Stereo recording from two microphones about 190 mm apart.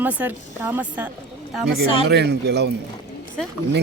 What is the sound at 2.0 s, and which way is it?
Speech, 60° right (ahead or behind).